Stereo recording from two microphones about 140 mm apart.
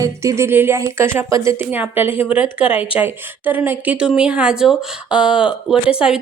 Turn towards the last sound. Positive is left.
turn(degrees=-5)  # may be behind; listen again after turning